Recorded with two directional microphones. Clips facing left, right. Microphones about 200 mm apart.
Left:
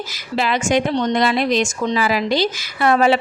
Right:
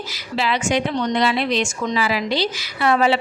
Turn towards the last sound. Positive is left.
turn(degrees=45)  # may be behind; listen again after turning